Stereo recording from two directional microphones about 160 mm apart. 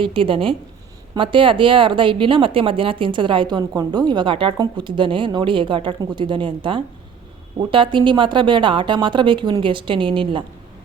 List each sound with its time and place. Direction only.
0.0 s speech: 35° right (ahead or behind)